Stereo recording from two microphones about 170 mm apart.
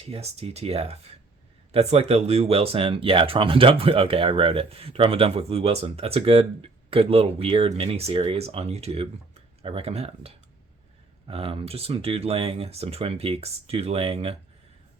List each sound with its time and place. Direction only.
0.0 s speech: 35° right (ahead or behind)